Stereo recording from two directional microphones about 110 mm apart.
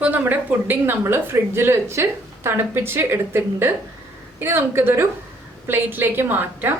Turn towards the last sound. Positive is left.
turn(degrees=-20)  # may be behind; listen again after turning